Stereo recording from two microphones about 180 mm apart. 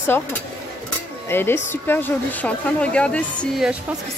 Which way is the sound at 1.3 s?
10° left (ahead or behind).